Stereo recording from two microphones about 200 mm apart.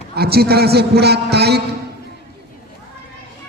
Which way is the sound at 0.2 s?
50° right (ahead or behind).